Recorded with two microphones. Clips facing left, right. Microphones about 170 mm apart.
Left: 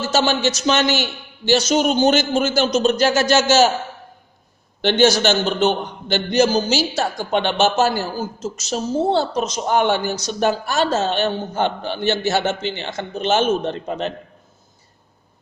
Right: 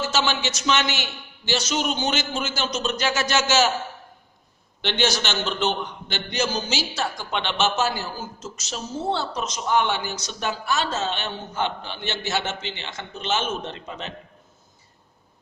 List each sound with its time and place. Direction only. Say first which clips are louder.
0.1 s a man's voice: left 7 dB; 45° left (ahead or behind)
4.8 s a man's voice: left 9 dB; 45° left (ahead or behind)